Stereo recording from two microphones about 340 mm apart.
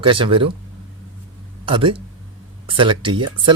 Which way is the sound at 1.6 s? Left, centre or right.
Centre.